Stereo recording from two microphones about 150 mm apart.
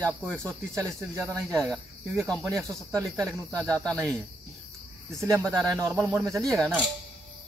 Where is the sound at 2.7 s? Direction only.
20° right (ahead or behind).